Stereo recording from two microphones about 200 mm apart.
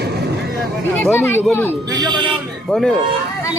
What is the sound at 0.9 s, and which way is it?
Speech, 10° left (ahead or behind).